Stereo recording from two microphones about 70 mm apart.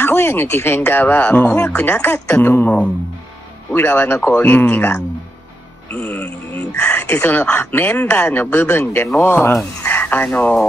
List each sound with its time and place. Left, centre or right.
0.0 s speech: left
3.7 s speech: left
5.9 s music: left
6.7 s speech: left